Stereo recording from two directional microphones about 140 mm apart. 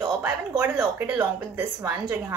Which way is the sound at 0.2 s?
15° right (ahead or behind).